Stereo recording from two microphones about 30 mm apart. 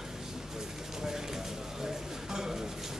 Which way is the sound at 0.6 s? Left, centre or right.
Centre.